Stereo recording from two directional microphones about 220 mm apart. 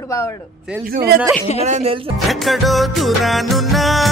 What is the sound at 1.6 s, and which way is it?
Speech, 30° right (ahead or behind).